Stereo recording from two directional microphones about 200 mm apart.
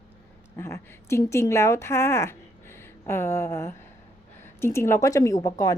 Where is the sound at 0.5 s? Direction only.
15° left (ahead or behind).